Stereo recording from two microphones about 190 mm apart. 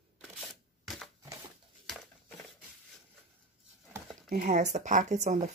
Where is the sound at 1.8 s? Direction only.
Centre (ahead or behind).